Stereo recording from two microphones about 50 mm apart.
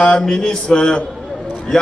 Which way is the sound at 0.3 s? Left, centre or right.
Centre.